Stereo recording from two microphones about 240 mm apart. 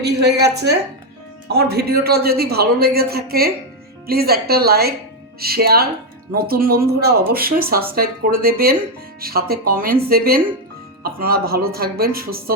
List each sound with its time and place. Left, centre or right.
0.0 s a woman's voice: right